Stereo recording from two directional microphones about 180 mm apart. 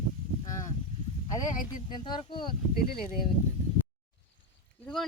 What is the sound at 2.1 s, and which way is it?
Speech, 25° left (ahead or behind).